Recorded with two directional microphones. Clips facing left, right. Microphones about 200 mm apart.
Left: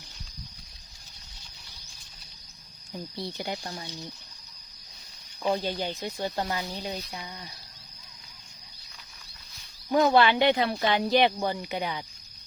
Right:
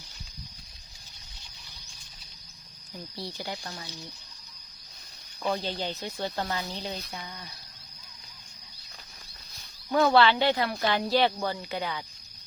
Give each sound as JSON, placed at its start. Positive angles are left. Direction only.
{"t": 3.2, "sound": "speech", "side_deg": 20}
{"t": 5.6, "sound": "speech", "side_deg": 15}
{"t": 9.9, "sound": "speech", "side_deg": 15}